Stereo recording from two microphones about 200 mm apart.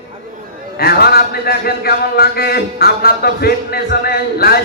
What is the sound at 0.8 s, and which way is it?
A man's voice, 50° left (ahead or behind).